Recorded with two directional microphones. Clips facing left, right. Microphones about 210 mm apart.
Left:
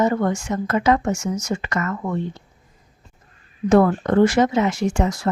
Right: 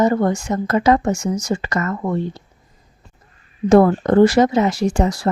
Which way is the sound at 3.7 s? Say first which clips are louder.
Right 3 dB; 35° right (ahead or behind).